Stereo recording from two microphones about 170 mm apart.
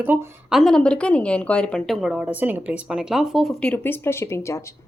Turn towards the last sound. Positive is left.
turn(degrees=15)  # may be behind; listen again after turning